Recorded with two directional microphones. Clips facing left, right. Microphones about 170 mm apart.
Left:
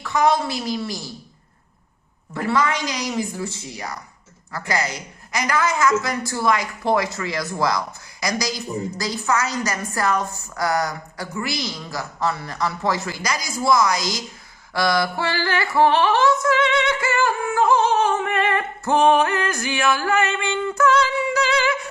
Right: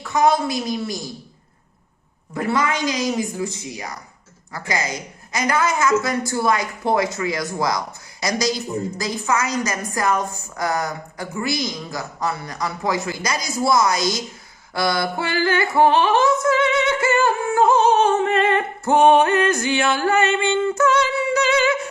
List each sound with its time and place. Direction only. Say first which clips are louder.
0.1 s a woman's voice: right 1 dB; 20° right (ahead or behind)
2.3 s a woman's voice: even; 20° right (ahead or behind)
21.3 s a sound: right 4 dB; 25° right (ahead or behind)